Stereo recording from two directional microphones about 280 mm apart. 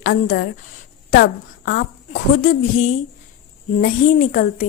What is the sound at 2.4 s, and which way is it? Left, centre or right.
A woman's voice, left.